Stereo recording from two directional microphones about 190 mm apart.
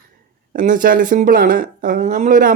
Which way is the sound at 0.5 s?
45° right (ahead or behind).